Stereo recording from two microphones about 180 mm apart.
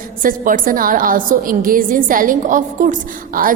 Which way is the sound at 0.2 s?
50° right (ahead or behind).